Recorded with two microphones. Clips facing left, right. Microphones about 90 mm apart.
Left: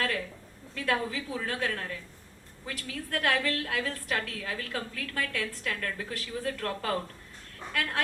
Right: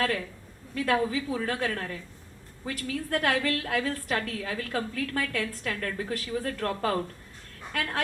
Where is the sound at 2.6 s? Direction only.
40° right (ahead or behind).